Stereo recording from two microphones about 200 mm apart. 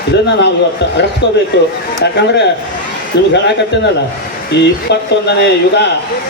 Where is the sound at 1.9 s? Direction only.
60° left (ahead or behind).